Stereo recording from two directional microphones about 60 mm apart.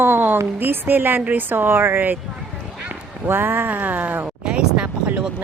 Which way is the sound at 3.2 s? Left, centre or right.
Right.